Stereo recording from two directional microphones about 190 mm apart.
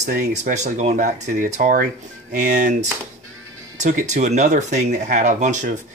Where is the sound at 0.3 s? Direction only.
40° right (ahead or behind).